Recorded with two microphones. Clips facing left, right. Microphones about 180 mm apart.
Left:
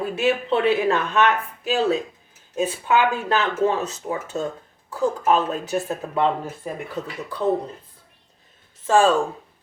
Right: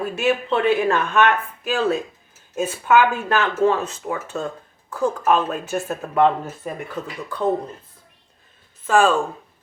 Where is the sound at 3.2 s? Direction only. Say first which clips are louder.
Right 2 dB; 25° left (ahead or behind).